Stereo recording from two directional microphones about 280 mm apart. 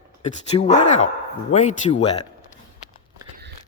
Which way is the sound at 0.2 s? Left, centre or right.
Left.